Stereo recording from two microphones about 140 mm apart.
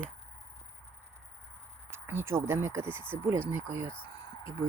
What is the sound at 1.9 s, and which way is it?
Speech, 15° right (ahead or behind).